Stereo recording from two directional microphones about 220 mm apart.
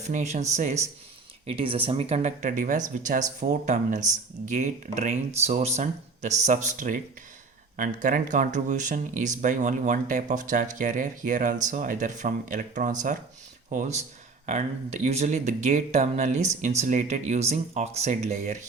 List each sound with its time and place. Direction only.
0.0 s speech: 30° right (ahead or behind)